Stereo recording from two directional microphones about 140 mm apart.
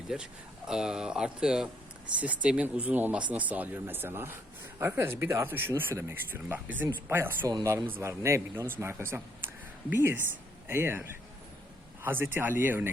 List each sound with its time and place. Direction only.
0.1 s speech: 5° right (ahead or behind)
12.0 s speech: 15° right (ahead or behind)